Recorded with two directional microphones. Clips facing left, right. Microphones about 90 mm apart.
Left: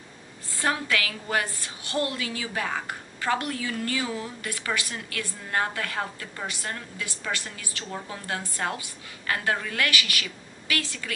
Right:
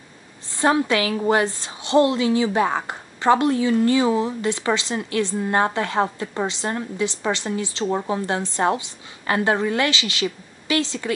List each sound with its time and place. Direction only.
0.6 s a woman's voice: 25° right (ahead or behind)